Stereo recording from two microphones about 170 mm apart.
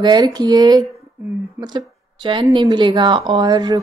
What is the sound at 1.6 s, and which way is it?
A woman's voice, 25° right (ahead or behind).